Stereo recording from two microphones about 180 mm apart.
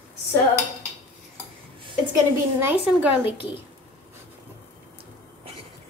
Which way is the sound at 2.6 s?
10° right (ahead or behind).